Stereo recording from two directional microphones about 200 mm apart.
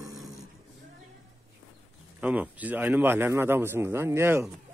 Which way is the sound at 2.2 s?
10° right (ahead or behind).